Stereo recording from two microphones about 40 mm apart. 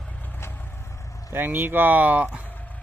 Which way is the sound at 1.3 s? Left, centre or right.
Right.